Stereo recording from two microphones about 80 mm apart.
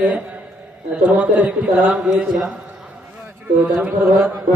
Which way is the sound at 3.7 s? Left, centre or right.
Centre.